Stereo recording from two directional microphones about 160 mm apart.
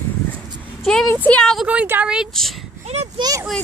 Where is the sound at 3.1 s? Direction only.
25° right (ahead or behind).